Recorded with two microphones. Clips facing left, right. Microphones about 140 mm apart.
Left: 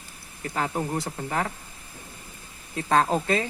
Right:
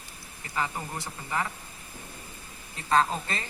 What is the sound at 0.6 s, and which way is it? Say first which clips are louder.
Speech: left 4 dB; 55° left (ahead or behind).